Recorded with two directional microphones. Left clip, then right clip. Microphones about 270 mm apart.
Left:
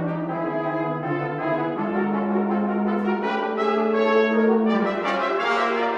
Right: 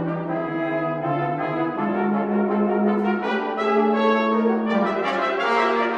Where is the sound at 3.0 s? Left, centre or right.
Right.